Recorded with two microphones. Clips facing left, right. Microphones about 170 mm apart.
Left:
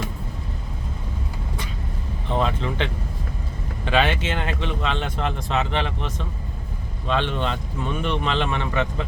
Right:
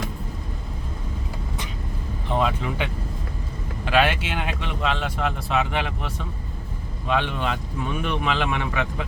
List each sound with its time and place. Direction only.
2.4 s speech: 5° right (ahead or behind)